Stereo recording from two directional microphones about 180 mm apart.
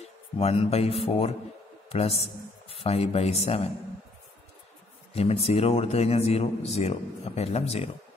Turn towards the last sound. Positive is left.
turn(degrees=35)  # may be behind; listen again after turning